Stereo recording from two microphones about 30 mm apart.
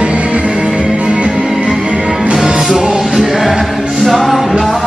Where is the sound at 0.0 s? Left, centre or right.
Right.